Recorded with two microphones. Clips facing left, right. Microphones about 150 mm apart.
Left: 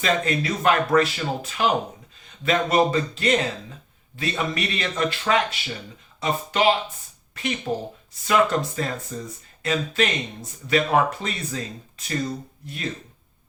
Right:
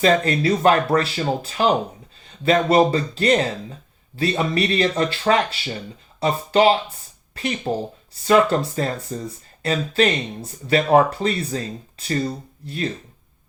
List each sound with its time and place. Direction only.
0.0 s speech: 35° right (ahead or behind)